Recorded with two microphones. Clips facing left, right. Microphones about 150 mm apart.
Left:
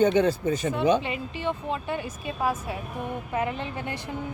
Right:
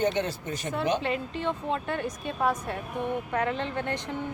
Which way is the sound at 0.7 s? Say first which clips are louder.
Left 1 dB; centre (ahead or behind).